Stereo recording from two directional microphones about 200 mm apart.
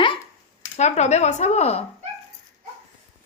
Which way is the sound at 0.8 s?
35° left (ahead or behind).